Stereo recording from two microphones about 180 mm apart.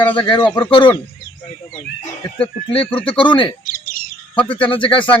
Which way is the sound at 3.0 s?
30° left (ahead or behind).